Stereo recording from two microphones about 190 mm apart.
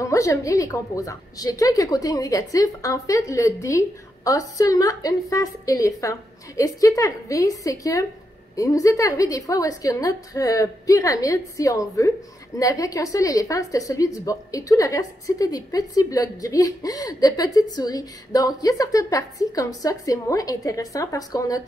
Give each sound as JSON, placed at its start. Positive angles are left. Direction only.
{"t": 0.0, "sound": "a woman's voice", "side_deg": 15}